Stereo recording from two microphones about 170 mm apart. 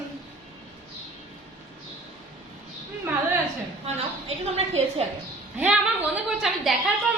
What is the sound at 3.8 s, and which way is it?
A woman's voice, 35° right (ahead or behind).